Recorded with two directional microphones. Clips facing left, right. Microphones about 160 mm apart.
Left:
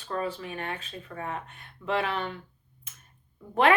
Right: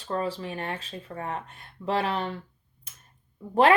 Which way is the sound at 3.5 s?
35° right (ahead or behind).